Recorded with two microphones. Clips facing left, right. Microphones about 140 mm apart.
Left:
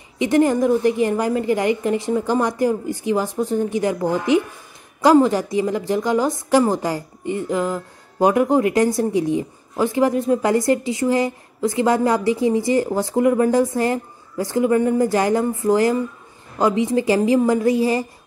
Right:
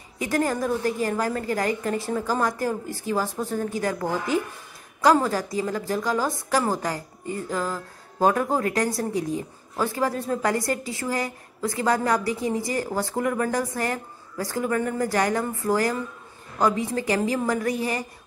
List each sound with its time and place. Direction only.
0.2 s speech: 20° left (ahead or behind)